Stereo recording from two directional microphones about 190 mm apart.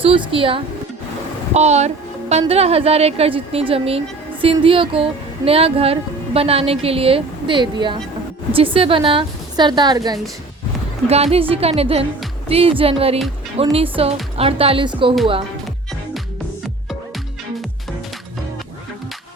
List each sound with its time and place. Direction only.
0.0 s a woman's voice: 30° right (ahead or behind)
11.1 s a woman's voice: 35° right (ahead or behind)